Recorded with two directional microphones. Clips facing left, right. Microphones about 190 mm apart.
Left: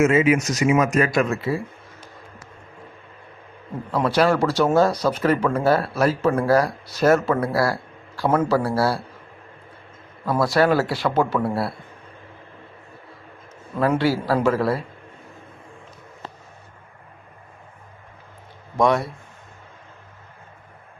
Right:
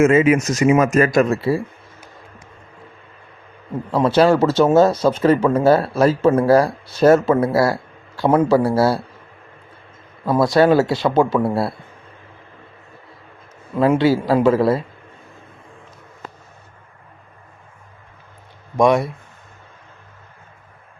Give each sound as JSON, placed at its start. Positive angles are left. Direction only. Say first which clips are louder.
{"t": 0.0, "sound": "speech", "louder": "right 4 dB", "side_deg": -50}
{"t": 3.9, "sound": "speech", "louder": "right 5 dB", "side_deg": -25}
{"t": 10.2, "sound": "speech", "louder": "right 5 dB", "side_deg": -20}
{"t": 13.7, "sound": "speech", "louder": "right 5 dB", "side_deg": -20}
{"t": 18.8, "sound": "speech", "louder": "right 4 dB", "side_deg": -15}